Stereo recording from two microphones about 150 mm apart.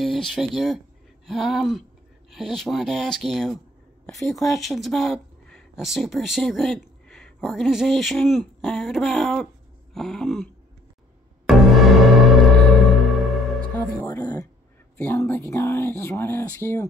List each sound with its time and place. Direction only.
0.0 s speech: centre (ahead or behind)
11.4 s music: centre (ahead or behind)
13.7 s music: 20° left (ahead or behind)
15.0 s speech: 15° left (ahead or behind)